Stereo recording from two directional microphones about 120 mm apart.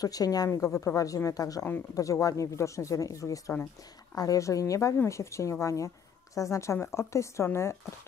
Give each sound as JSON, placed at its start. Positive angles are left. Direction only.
{"t": 0.0, "sound": "speech", "side_deg": 30}